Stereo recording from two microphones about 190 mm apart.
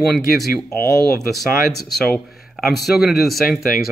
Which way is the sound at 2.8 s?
Centre (ahead or behind).